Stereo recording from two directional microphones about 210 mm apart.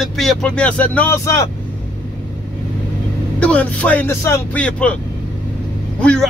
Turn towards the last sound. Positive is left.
turn(degrees=5)  # may be behind; listen again after turning